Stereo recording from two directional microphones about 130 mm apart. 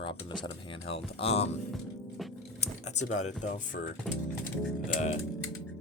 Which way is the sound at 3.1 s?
65° left (ahead or behind).